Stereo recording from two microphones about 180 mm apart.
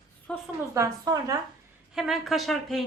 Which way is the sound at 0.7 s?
20° right (ahead or behind).